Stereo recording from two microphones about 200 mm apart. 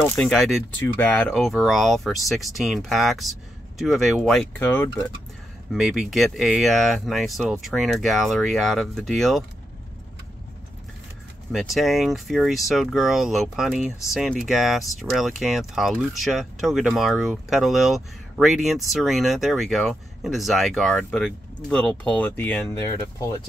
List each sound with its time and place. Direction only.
0.0 s speech: 10° left (ahead or behind)
5.7 s speech: centre (ahead or behind)
11.5 s speech: centre (ahead or behind); by 23.4 s 15° left (ahead or behind)